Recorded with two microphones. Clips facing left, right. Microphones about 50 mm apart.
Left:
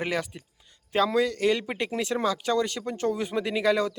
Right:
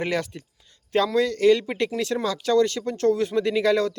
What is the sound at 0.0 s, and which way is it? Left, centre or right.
Speech, centre.